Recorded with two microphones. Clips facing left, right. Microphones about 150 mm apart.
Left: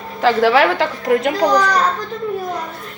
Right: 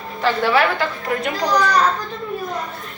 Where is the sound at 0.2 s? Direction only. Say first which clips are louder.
Left 4 dB; 90° left.